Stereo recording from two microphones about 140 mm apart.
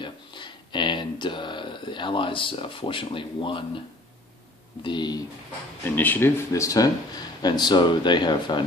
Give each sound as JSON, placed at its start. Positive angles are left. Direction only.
{"t": 0.0, "sound": "speech", "side_deg": 35}
{"t": 4.8, "sound": "speech", "side_deg": 30}
{"t": 5.9, "sound": "speech", "side_deg": 15}